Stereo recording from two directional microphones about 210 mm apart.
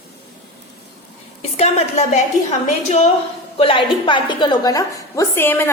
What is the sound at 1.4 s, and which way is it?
A woman's voice, 30° left (ahead or behind).